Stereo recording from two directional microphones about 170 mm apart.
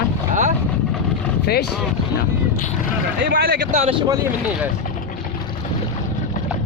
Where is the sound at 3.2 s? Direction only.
65° right (ahead or behind).